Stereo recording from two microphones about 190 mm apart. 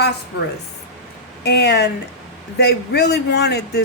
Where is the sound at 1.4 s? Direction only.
60° left (ahead or behind).